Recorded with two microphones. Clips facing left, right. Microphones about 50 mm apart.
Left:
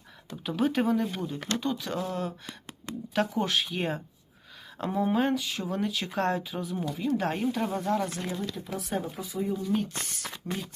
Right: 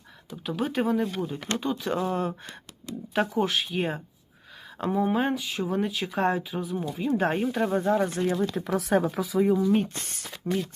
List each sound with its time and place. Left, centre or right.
0.3 s speech: centre
2.0 s speech: right
3.2 s speech: centre
7.0 s speech: right
8.5 s speech: right
10.5 s speech: right